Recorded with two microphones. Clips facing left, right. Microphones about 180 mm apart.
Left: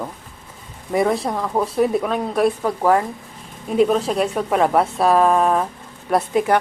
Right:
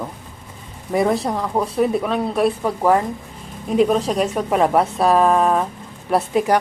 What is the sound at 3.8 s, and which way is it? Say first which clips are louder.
A woman's voice: even; centre (ahead or behind).